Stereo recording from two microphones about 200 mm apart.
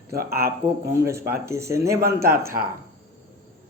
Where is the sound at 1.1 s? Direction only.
10° right (ahead or behind).